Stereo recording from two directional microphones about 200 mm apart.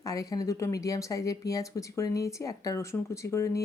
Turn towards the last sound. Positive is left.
turn(degrees=15)  # may be behind; listen again after turning